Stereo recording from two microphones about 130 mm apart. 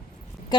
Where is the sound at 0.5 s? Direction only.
35° left (ahead or behind).